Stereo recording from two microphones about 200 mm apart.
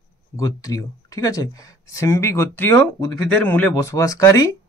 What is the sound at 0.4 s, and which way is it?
A man's voice, 15° left (ahead or behind).